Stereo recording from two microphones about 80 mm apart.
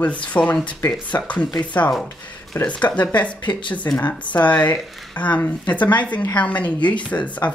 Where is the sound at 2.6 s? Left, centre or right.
Centre.